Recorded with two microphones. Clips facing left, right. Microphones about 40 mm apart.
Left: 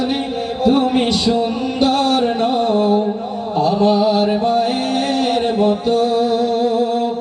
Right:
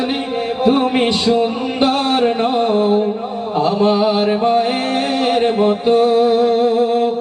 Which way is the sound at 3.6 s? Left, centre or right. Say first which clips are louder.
Even; right.